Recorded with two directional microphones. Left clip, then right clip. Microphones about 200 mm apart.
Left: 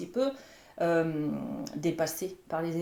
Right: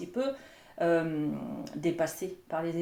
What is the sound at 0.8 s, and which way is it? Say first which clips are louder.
Speech: even; 30° left (ahead or behind).